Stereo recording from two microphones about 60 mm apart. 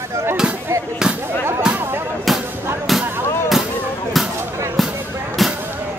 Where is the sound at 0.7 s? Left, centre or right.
Right.